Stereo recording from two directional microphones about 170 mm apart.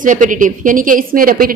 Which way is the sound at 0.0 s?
50° right (ahead or behind).